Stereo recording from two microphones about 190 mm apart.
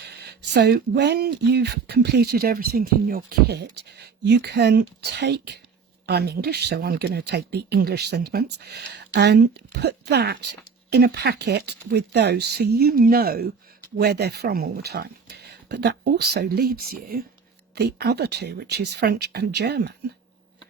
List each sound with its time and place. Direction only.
0.0 s speech: 60° right (ahead or behind)